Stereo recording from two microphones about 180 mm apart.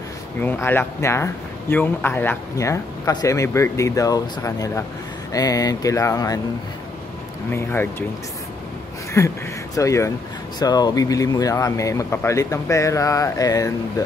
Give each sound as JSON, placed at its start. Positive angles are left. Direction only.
{"t": 0.4, "sound": "a man's voice", "side_deg": 10}
{"t": 7.5, "sound": "a man's voice", "side_deg": 10}
{"t": 9.2, "sound": "a man's voice", "side_deg": 15}